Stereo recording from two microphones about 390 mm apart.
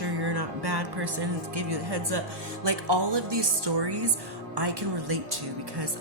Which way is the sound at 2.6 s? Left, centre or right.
Right.